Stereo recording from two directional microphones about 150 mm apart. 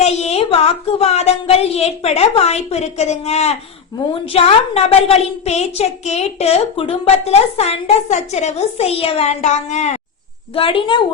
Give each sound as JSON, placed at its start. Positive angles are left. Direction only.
{"t": 0.0, "sound": "a woman's voice", "side_deg": 45}
{"t": 10.5, "sound": "a woman's voice", "side_deg": 35}